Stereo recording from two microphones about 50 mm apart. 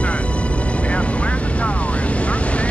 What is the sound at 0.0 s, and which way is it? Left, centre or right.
Speech, left.